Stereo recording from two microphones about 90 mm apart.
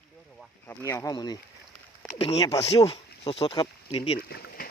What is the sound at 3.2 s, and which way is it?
Speech, 90° left.